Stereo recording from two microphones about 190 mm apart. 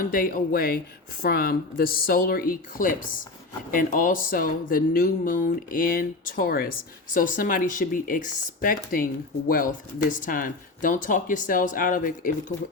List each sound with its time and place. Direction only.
0.0 s speech: 45° left (ahead or behind)